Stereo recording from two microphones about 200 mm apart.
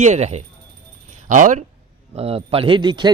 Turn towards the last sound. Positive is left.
turn(degrees=-20)  # may be behind; listen again after turning